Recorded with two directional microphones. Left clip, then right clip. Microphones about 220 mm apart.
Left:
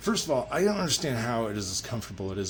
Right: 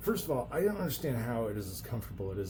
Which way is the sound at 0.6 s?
40° left (ahead or behind).